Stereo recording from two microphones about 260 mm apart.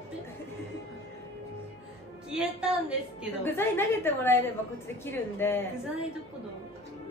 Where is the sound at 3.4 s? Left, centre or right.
Centre.